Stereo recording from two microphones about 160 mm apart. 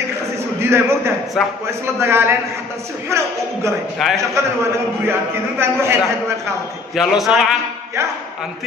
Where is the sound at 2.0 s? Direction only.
15° right (ahead or behind).